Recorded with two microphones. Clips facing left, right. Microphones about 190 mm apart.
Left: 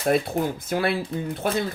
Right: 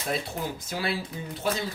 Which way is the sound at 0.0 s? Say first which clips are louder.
Left 9 dB; 55° left (ahead or behind).